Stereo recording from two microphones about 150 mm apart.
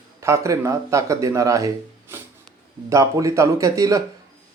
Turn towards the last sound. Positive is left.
turn(degrees=-20)  # may be behind; listen again after turning